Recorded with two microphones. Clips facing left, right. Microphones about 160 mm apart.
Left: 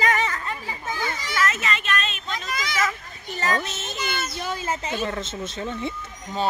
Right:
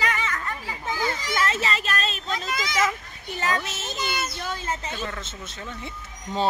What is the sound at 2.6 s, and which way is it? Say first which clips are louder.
Speech: right 1 dB; 20° right (ahead or behind).